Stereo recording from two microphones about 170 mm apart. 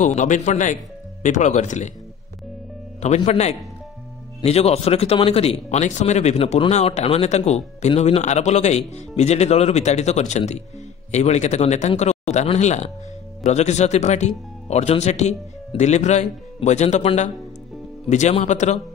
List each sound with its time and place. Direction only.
0.0 s speech: 45° left (ahead or behind)
3.3 s speech: 40° left (ahead or behind)